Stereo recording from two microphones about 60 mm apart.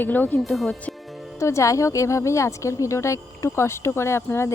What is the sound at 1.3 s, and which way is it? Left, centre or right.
Speech, left.